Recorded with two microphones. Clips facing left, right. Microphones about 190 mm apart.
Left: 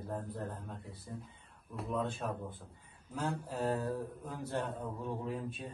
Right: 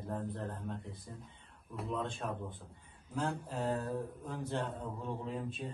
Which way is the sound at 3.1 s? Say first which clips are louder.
Even; 10° left (ahead or behind).